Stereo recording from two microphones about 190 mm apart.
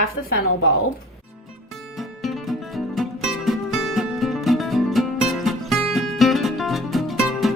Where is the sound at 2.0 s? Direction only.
Centre (ahead or behind).